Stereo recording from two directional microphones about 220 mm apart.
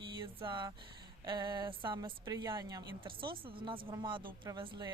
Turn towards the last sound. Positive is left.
turn(degrees=-20)  # may be behind; listen again after turning